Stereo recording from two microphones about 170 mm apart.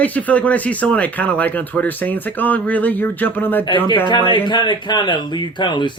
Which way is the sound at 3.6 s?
30° left (ahead or behind).